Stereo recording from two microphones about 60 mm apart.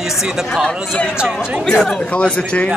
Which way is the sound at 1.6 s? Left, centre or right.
Centre.